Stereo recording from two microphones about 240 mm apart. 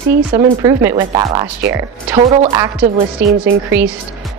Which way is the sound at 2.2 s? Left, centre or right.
Right.